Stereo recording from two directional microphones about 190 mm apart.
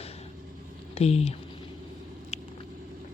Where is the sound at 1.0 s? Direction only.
35° left (ahead or behind).